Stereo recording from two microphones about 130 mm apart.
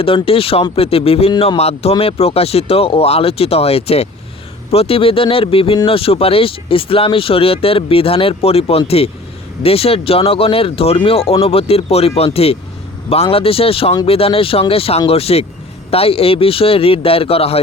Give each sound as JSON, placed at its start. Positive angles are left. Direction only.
{"t": 0.0, "sound": "speech", "side_deg": 45}